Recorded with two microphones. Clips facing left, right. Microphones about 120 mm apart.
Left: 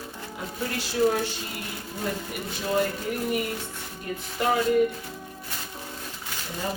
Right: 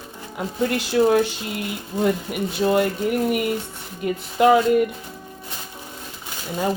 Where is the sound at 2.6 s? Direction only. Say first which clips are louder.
Right 6 dB; 70° right (ahead or behind).